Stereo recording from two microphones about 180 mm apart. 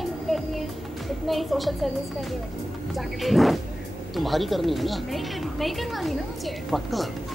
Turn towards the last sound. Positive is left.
turn(degrees=0)  # may be behind; listen again after turning